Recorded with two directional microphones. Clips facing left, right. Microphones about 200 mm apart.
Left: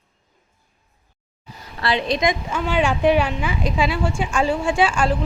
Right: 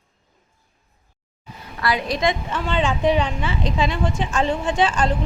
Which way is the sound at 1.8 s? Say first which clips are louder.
Left 1 dB; 25° left (ahead or behind).